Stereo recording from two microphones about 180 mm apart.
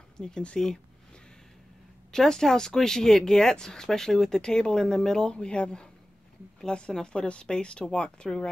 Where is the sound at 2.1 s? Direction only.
5° left (ahead or behind).